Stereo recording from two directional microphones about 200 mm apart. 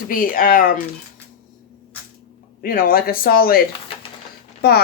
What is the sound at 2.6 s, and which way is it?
Speech, 45° left (ahead or behind).